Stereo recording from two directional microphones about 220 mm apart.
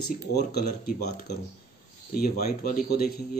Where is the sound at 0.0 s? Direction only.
45° left (ahead or behind).